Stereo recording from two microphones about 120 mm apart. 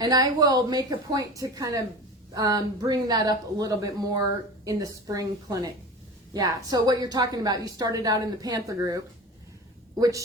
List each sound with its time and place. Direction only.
0.0 s a woman's voice: 35° right (ahead or behind)